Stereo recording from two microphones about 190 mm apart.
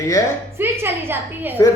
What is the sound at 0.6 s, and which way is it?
Speech, 10° right (ahead or behind).